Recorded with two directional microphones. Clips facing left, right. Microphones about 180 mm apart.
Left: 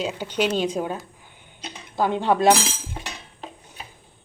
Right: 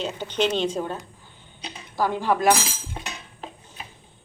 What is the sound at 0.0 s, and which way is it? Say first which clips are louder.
Speech: left 1 dB; 10° left (ahead or behind).